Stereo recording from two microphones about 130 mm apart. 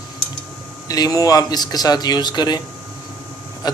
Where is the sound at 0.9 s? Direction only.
25° left (ahead or behind).